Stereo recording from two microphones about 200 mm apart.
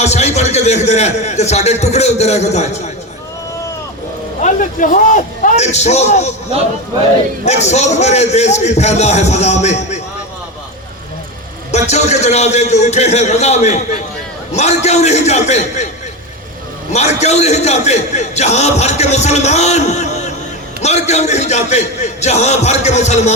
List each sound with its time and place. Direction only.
0.0 s a man's voice: 35° left (ahead or behind)
4.4 s a man's voice: 40° left (ahead or behind)
7.4 s a man's voice: 35° left (ahead or behind)
11.7 s a man's voice: 35° left (ahead or behind)
16.9 s a man's voice: 35° left (ahead or behind)